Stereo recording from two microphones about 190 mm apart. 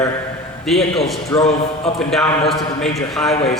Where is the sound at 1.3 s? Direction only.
15° left (ahead or behind).